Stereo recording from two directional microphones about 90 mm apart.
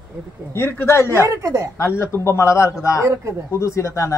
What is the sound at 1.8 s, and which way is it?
Speech, 30° left (ahead or behind).